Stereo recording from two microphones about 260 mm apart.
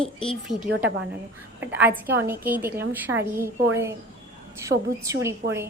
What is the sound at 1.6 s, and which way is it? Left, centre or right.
A woman's voice, centre.